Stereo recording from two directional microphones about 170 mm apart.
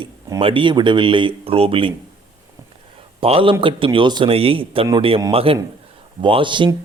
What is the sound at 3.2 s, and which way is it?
A man's voice, 30° right (ahead or behind).